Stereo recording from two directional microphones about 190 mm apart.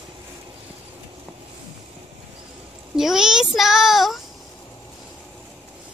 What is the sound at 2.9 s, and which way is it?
A child's voice, centre (ahead or behind).